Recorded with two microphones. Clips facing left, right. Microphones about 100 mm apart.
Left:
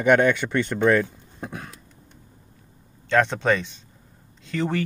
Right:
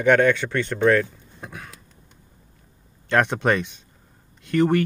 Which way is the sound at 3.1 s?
15° right (ahead or behind).